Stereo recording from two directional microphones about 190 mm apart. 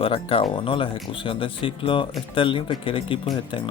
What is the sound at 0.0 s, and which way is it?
Speech, 30° left (ahead or behind).